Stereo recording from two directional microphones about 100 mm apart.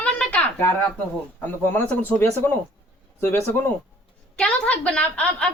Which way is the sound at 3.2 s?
20° left (ahead or behind).